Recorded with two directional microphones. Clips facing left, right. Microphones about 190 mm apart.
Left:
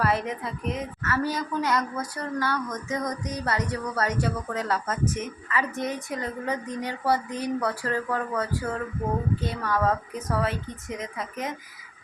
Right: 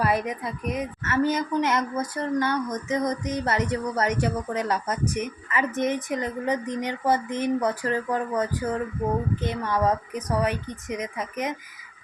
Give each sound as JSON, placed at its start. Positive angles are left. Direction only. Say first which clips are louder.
{"t": 0.0, "sound": "a woman's voice", "louder": "right 1 dB", "side_deg": -15}